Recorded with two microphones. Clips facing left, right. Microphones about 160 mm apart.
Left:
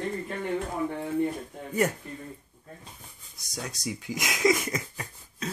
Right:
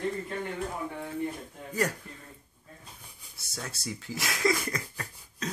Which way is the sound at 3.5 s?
15° left (ahead or behind).